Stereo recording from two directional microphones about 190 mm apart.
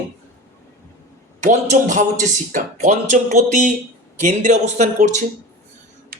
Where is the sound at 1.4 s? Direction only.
40° right (ahead or behind).